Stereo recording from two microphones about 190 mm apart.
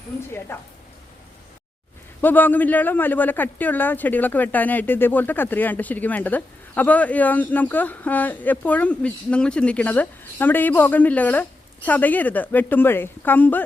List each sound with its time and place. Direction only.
0.2 s speech: 15° left (ahead or behind)
2.2 s speech: 10° left (ahead or behind)